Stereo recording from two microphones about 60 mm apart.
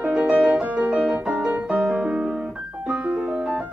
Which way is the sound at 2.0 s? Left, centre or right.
Centre.